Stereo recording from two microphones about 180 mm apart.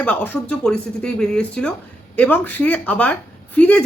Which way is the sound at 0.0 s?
10° left (ahead or behind).